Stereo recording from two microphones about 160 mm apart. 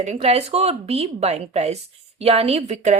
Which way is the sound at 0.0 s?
45° right (ahead or behind).